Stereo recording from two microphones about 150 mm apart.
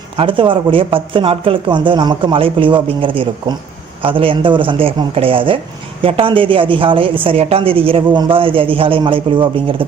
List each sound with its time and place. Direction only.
0.2 s a woman's voice: 35° right (ahead or behind)